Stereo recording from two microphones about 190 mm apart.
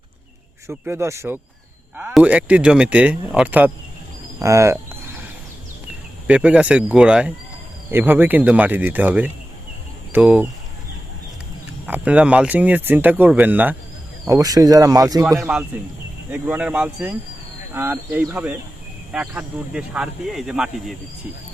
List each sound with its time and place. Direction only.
0.7 s speech: 15° right (ahead or behind)
4.4 s a sound: 15° right (ahead or behind)
6.2 s speech: 5° right (ahead or behind)
11.9 s speech: 5° right (ahead or behind)
15.4 s speech: 5° right (ahead or behind)